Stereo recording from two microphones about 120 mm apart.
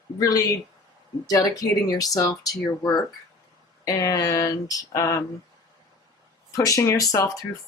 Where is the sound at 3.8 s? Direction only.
30° left (ahead or behind).